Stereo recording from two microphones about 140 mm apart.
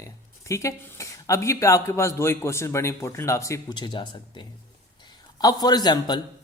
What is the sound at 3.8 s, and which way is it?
A man's voice, 35° left (ahead or behind).